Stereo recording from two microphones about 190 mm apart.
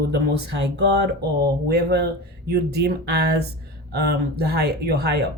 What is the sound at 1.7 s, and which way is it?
Speech, 60° right (ahead or behind).